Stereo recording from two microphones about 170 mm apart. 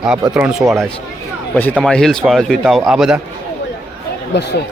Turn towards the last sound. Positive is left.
turn(degrees=80)